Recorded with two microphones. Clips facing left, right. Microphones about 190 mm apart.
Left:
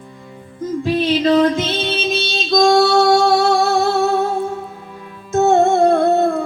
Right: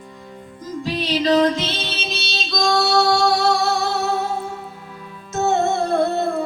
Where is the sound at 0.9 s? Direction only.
55° left (ahead or behind).